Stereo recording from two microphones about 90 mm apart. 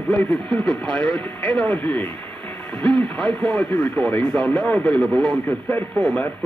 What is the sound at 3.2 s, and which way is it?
Speech, 10° left (ahead or behind).